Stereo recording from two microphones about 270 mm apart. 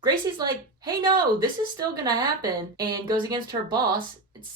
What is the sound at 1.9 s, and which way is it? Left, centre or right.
Speech, centre.